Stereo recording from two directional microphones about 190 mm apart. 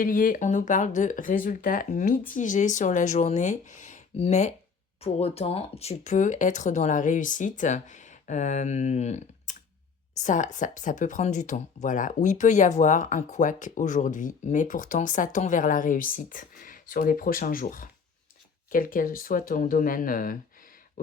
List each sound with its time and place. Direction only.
0.0 s speech: 45° left (ahead or behind)